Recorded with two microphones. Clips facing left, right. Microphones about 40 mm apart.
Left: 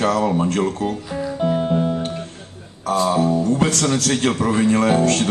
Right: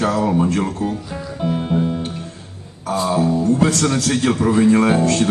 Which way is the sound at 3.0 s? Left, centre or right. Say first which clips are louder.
Right 2 dB; left.